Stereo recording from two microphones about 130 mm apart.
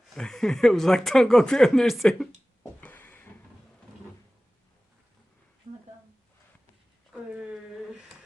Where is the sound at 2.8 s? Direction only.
10° left (ahead or behind).